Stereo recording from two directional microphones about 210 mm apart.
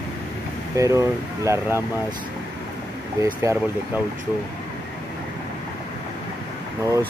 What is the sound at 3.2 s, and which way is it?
Speech, 15° right (ahead or behind).